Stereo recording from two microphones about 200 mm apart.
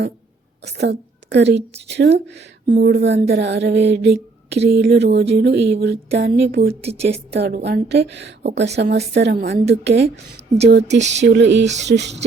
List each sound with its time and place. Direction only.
0.8 s a woman's voice: 60° right (ahead or behind)
6.8 s a woman's voice: 30° right (ahead or behind)
7.3 s speech: 55° right (ahead or behind)
11.0 s a woman's voice: 35° right (ahead or behind)
11.3 s speech: 65° right (ahead or behind)
11.6 s a woman's voice: 35° right (ahead or behind)
11.9 s speech: 60° right (ahead or behind)